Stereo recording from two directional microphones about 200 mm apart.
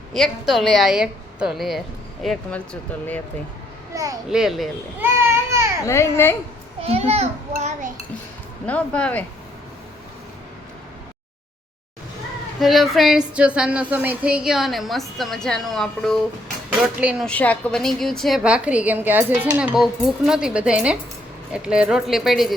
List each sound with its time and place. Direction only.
0.1 s a woman's voice: centre (ahead or behind)
3.9 s a child's voice: 15° right (ahead or behind)
4.3 s a woman's voice: centre (ahead or behind)
5.0 s a sound: 10° right (ahead or behind)
5.8 s speech: 15° left (ahead or behind)
6.8 s a child's voice: 30° right (ahead or behind)
8.6 s speech: 5° left (ahead or behind)
12.5 s a woman's voice: centre (ahead or behind)
17.2 s a woman's voice: 5° left (ahead or behind)